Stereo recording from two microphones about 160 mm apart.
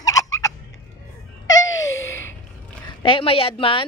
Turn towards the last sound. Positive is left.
turn(degrees=35)  # may be behind; listen again after turning